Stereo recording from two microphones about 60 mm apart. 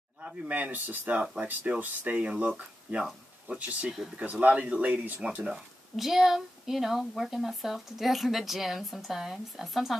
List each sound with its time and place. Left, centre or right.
0.5 s speech: right
1.4 s speech: centre
3.0 s a sound: centre
3.5 s speech: right
5.3 s speech: centre
5.9 s a woman's voice: centre